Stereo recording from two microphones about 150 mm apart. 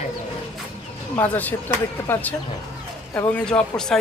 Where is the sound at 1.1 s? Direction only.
10° left (ahead or behind).